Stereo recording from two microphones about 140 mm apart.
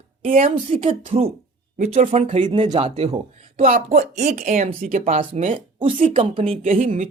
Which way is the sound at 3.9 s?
55° right (ahead or behind).